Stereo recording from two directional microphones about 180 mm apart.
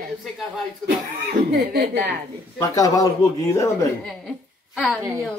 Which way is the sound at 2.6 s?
20° left (ahead or behind).